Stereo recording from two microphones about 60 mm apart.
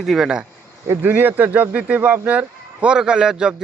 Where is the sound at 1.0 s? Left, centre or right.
Right; by 3.5 s centre.